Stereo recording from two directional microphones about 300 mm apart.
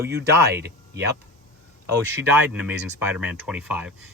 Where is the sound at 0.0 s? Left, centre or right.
Right.